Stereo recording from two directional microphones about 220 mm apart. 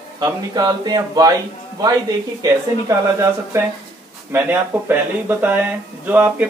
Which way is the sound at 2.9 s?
15° right (ahead or behind).